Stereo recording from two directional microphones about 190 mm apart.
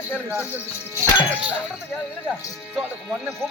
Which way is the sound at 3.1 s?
Centre (ahead or behind).